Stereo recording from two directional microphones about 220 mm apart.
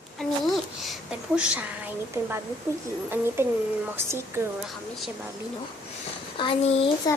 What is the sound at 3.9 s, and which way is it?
Speech, 10° right (ahead or behind).